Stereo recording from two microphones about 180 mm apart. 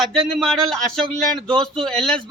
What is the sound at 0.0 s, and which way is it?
A man's voice, centre (ahead or behind).